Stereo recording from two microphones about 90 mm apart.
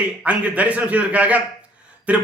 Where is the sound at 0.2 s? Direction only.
15° right (ahead or behind).